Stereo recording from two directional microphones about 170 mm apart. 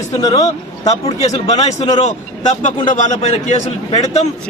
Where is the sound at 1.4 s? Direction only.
40° left (ahead or behind).